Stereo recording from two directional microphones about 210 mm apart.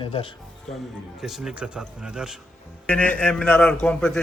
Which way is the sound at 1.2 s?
5° right (ahead or behind).